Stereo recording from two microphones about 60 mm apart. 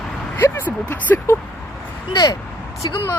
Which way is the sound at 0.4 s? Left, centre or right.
Left.